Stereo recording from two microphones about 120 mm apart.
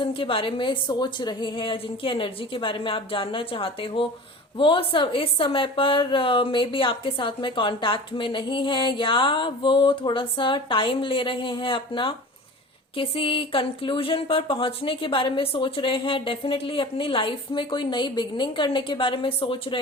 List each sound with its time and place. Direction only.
0.0 s a woman's voice: 45° left (ahead or behind)